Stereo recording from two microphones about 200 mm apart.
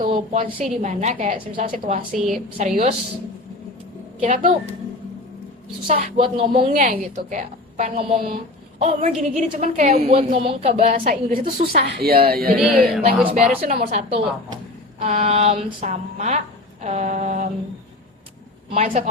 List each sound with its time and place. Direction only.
0.1 s a woman's voice: 25° right (ahead or behind)
2.1 s speech: centre (ahead or behind)
2.6 s a woman's voice: 35° right (ahead or behind)
4.2 s a woman's voice: 40° right (ahead or behind)
5.9 s speech: 25° right (ahead or behind)
6.8 s a woman's voice: 40° right (ahead or behind)
10.9 s a woman's voice: 45° right (ahead or behind)
12.5 s speech: centre (ahead or behind)
13.6 s a woman's voice: 45° right (ahead or behind)
13.9 s a woman's voice: 30° right (ahead or behind)
18.7 s a woman's voice: 35° right (ahead or behind)